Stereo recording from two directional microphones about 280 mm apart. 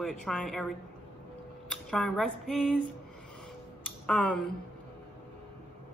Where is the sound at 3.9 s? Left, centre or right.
Centre.